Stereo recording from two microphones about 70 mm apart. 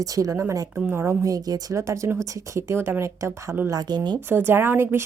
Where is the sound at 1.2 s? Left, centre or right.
Right.